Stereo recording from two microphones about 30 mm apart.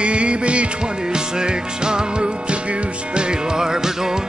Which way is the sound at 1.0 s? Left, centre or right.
Right.